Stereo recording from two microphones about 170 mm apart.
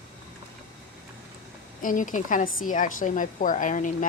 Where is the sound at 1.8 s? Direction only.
50° left (ahead or behind).